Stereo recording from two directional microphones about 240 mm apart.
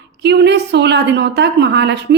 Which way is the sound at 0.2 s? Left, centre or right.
Right.